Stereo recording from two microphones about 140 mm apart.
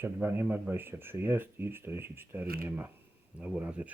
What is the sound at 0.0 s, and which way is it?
Speech, 15° right (ahead or behind).